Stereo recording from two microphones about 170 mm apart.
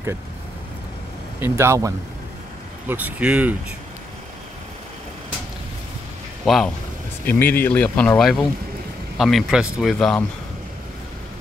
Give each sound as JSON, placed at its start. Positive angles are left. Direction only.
{"t": 1.4, "sound": "speech", "side_deg": -15}
{"t": 6.4, "sound": "a man's voice", "side_deg": 0}